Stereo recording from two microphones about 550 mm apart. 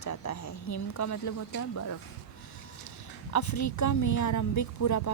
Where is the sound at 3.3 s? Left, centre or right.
Left.